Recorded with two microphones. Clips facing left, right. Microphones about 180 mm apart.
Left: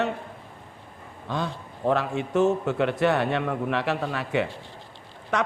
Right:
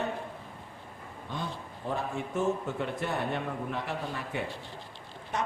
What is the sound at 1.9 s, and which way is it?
Speech, 80° left.